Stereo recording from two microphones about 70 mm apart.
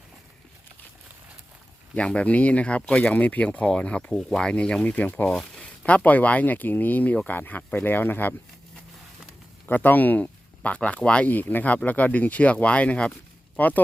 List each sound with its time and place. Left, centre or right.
2.0 s speech: centre
4.9 s speech: left
9.6 s speech: left